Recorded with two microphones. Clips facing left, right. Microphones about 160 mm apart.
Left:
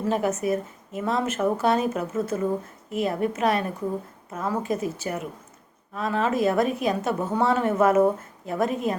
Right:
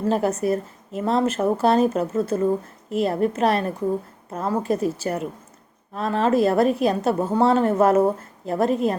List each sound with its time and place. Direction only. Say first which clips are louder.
0.1 s a woman's voice: right 2 dB; 35° right (ahead or behind)